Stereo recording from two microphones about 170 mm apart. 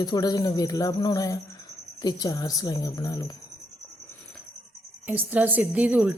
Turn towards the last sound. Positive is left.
turn(degrees=-10)  # may be behind; listen again after turning